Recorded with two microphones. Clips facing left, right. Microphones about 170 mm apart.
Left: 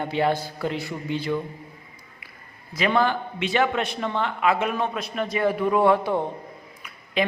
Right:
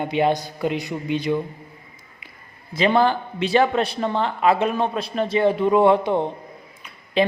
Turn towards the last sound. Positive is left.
turn(degrees=-30)  # may be behind; listen again after turning